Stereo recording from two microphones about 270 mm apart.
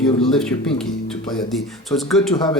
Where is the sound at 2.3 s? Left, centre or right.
Centre.